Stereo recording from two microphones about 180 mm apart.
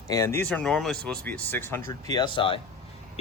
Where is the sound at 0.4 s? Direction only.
5° left (ahead or behind).